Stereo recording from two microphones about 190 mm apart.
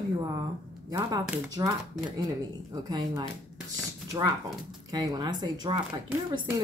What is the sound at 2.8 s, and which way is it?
Speech, 20° right (ahead or behind).